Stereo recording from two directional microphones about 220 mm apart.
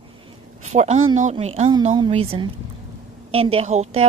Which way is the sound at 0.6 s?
30° right (ahead or behind).